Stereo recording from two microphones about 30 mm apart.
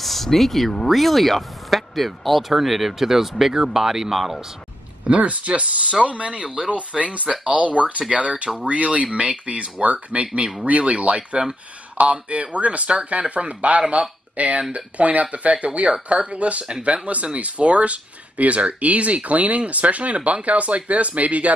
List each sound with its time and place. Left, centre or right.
0.0 s speech: centre
3.5 s speech: right
3.8 s speech: centre
5.0 s speech: right
7.0 s speech: right